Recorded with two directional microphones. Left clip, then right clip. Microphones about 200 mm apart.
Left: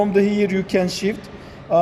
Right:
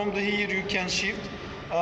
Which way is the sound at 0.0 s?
65° left (ahead or behind).